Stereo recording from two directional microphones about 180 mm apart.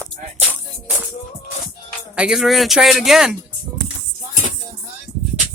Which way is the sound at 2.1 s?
5° right (ahead or behind).